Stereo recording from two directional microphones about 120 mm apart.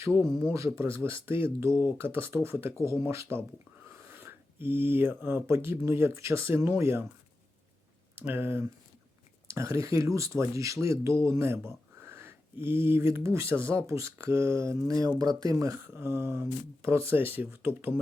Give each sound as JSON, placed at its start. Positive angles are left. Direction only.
{"t": 0.4, "sound": "speech", "side_deg": -25}
{"t": 8.1, "sound": "speech", "side_deg": -20}